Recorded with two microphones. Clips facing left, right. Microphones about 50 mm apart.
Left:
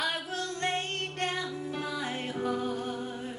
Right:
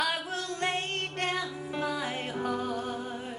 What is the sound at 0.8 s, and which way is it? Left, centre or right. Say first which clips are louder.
Music: right 1 dB; right.